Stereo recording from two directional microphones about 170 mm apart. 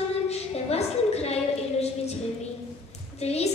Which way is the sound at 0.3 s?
40° left (ahead or behind).